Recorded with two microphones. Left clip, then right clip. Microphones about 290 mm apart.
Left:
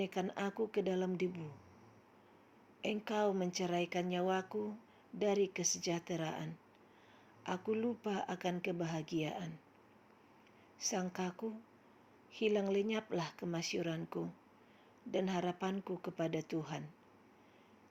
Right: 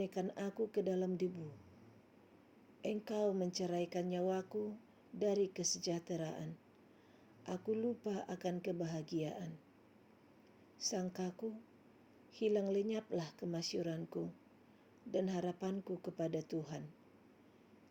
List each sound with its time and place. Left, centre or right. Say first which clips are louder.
0.0 s speech: left 3 dB; left
2.8 s speech: left 2 dB; left
4.4 s speech: left 1 dB; left
5.2 s speech: left 2 dB; left
7.7 s speech: even; left
10.8 s speech: left 2 dB; left